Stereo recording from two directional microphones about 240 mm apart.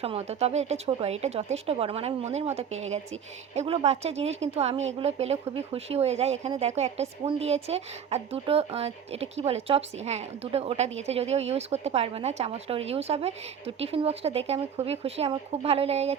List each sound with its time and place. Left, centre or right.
0.0 s speech: right
3.5 s speech: right